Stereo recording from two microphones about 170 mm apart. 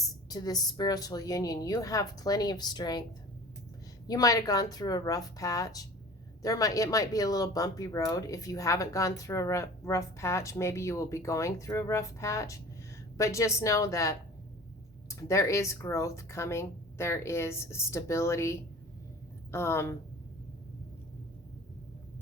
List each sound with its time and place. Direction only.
0.3 s speech: 20° left (ahead or behind)
4.0 s speech: 20° left (ahead or behind)